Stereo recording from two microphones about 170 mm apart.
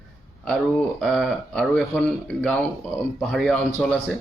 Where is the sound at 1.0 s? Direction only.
Centre (ahead or behind).